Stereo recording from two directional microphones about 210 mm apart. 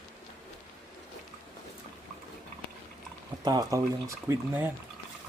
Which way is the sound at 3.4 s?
20° right (ahead or behind).